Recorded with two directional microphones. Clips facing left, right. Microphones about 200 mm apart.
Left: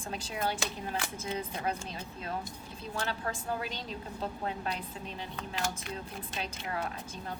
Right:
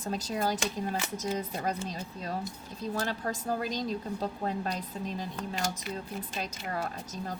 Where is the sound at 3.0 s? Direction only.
40° right (ahead or behind).